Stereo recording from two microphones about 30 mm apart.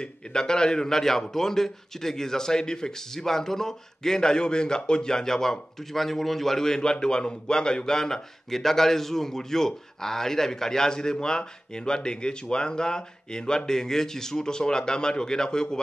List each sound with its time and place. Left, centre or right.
0.0 s a man's voice: left
3.2 s a man's voice: centre
5.9 s a man's voice: centre; by 15.8 s left